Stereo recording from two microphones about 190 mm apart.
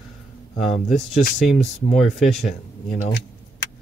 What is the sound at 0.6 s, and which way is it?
Speech, 35° left (ahead or behind).